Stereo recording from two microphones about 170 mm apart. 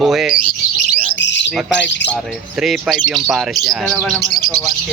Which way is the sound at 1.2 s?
90° left.